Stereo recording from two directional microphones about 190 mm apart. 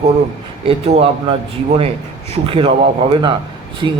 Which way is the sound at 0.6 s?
30° right (ahead or behind).